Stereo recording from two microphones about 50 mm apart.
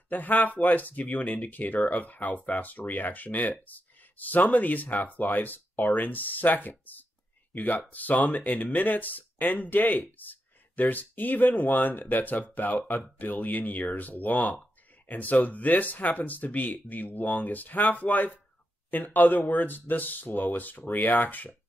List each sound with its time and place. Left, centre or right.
0.1 s speech: left